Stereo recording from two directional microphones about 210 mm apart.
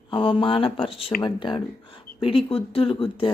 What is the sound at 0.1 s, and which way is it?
Speech, 25° left (ahead or behind).